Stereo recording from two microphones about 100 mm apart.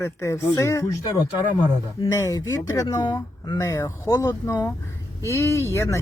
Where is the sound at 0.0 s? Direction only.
30° left (ahead or behind).